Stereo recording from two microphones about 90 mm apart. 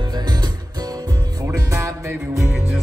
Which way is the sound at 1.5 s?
35° right (ahead or behind).